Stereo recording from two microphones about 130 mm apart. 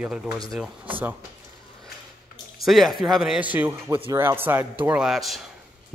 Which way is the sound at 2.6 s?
Centre (ahead or behind).